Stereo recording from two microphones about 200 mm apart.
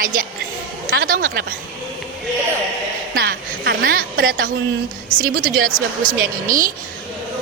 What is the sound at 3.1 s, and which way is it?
A woman's voice, 50° right (ahead or behind).